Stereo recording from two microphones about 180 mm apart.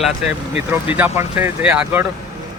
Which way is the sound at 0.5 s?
10° right (ahead or behind).